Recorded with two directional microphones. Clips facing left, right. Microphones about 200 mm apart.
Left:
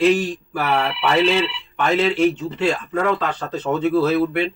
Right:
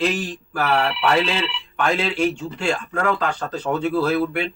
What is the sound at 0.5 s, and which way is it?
Speech, 5° left (ahead or behind).